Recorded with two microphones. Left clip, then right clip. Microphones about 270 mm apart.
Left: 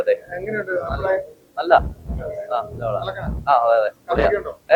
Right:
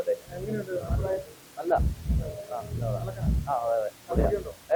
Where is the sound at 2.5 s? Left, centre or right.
Centre.